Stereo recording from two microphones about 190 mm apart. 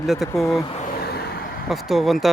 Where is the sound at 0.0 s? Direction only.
Centre (ahead or behind).